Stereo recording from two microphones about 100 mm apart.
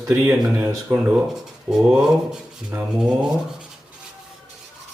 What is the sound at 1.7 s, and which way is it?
Speech, 5° right (ahead or behind).